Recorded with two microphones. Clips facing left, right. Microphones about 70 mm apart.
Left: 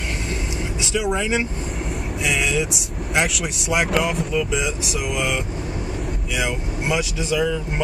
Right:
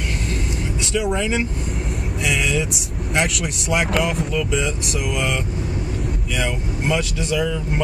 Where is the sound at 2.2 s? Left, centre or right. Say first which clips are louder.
Even; centre.